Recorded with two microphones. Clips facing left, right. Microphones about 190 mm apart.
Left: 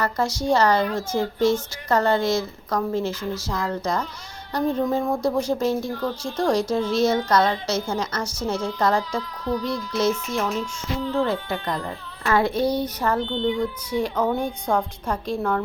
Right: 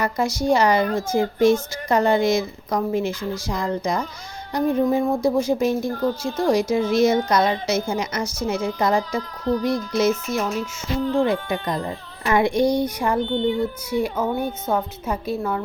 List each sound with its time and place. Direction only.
0.0 s a woman's voice: 10° right (ahead or behind)
9.5 s music: 45° right (ahead or behind)
11.2 s a woman's voice: 15° right (ahead or behind)